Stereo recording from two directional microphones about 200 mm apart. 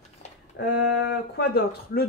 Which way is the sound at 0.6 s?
60° left (ahead or behind).